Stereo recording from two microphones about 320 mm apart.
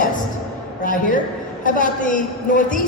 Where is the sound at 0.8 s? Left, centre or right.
Left.